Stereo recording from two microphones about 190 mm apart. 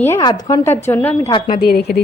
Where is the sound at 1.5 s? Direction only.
50° left (ahead or behind).